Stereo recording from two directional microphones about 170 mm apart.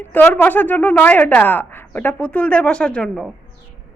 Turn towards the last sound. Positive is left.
turn(degrees=5)  # may be behind; listen again after turning